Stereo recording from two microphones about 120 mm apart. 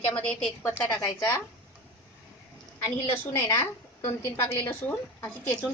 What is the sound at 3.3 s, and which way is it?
A woman's voice, 25° left (ahead or behind).